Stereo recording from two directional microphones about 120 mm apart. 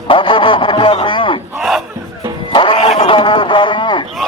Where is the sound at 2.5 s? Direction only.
45° left (ahead or behind).